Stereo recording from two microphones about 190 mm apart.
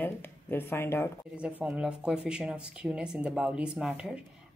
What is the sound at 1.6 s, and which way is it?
A woman's voice, 5° right (ahead or behind).